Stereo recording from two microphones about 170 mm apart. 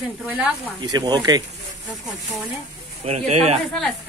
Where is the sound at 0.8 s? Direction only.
25° right (ahead or behind).